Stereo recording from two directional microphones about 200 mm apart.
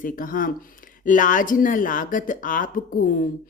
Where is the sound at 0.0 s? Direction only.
45° left (ahead or behind).